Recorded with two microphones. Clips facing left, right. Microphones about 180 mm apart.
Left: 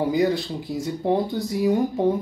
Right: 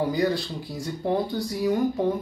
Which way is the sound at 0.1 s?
20° left (ahead or behind).